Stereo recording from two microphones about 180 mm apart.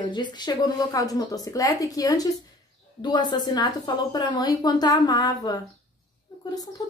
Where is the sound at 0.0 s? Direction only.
25° left (ahead or behind).